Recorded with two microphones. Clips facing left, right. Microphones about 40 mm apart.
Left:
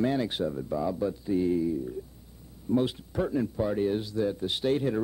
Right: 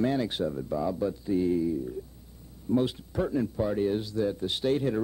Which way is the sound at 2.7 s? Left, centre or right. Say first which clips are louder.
Even; centre.